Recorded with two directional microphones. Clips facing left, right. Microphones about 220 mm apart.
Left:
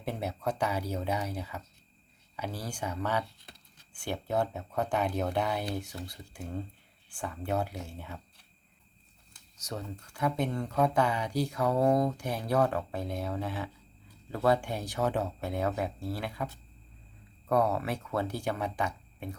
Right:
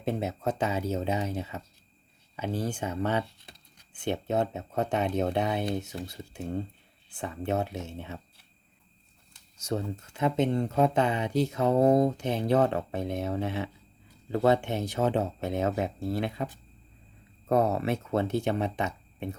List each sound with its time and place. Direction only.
0.0 s speech: 20° right (ahead or behind)
9.6 s speech: 25° right (ahead or behind)
17.5 s speech: 25° right (ahead or behind)